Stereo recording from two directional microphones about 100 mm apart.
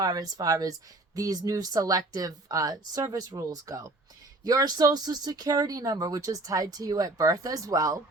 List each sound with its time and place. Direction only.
0.0 s speech: 40° right (ahead or behind)